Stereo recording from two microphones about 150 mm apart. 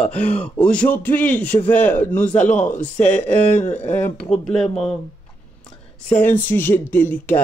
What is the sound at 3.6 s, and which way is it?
Speech, 50° left (ahead or behind).